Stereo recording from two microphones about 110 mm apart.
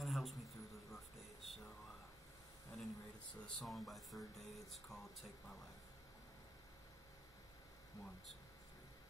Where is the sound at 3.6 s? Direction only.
Centre (ahead or behind).